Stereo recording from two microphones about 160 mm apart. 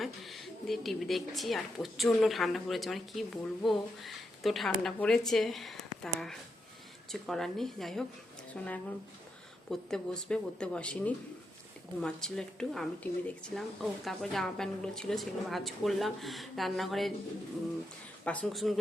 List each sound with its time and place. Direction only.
0.0 s a woman's voice: centre (ahead or behind)
9.6 s a woman's voice: 5° left (ahead or behind)
18.3 s a woman's voice: 5° left (ahead or behind)